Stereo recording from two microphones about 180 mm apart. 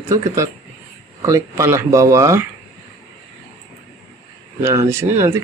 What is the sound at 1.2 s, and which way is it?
Speech, 15° right (ahead or behind).